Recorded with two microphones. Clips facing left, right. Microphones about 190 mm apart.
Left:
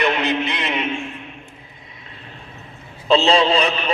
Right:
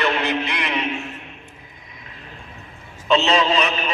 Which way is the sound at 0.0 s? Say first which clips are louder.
Left 2 dB; 20° left (ahead or behind).